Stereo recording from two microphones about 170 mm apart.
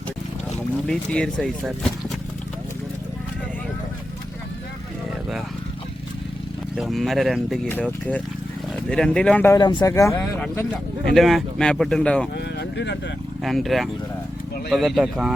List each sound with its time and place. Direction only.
0.9 s speech: 5° left (ahead or behind)
6.7 s speech: centre (ahead or behind)
9.6 s speech: 25° left (ahead or behind)
11.0 s speech: centre (ahead or behind)
12.5 s vehicle: 85° left
13.4 s speech: centre (ahead or behind)